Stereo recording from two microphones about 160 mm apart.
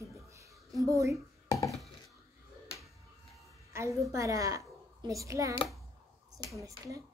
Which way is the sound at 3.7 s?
20° right (ahead or behind).